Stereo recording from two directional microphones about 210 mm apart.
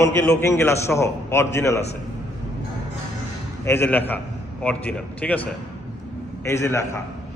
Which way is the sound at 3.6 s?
10° left (ahead or behind).